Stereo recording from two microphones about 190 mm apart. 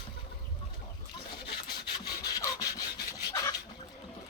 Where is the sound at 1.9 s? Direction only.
20° left (ahead or behind).